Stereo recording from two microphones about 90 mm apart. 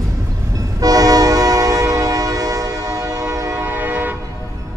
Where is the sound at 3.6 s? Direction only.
20° right (ahead or behind).